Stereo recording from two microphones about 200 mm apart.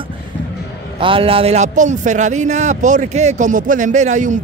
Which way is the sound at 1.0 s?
25° right (ahead or behind).